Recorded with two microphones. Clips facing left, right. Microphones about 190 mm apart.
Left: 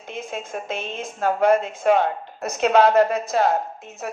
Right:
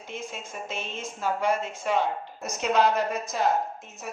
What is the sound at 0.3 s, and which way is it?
A woman's voice, 55° left (ahead or behind).